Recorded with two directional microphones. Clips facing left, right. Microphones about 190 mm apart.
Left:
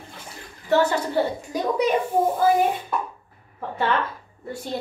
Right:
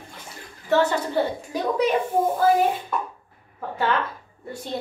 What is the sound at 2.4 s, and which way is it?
A woman's voice, centre (ahead or behind).